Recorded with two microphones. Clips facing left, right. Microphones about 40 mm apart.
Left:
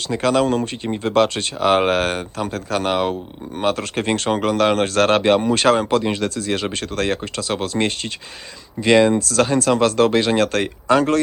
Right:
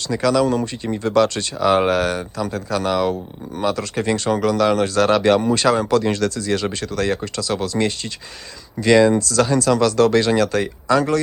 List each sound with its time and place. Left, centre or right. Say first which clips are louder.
0.1 s speech: even; left
5.2 s speech: even; left
5.5 s speech: left 1 dB; left
6.0 s speech: right 1 dB; left